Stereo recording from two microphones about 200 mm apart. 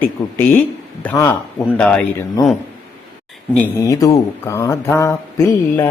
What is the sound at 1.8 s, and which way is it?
Speech, 5° left (ahead or behind).